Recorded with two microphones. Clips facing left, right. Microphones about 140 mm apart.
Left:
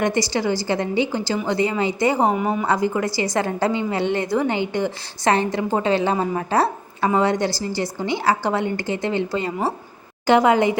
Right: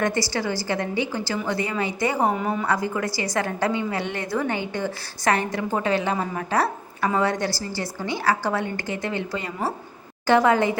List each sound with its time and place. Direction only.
0.0 s a woman's voice: 20° left (ahead or behind)
2.3 s a woman's voice: 15° left (ahead or behind)